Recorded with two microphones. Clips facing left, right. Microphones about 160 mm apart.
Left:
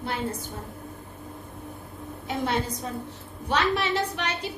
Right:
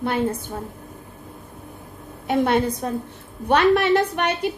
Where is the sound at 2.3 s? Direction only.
60° right (ahead or behind).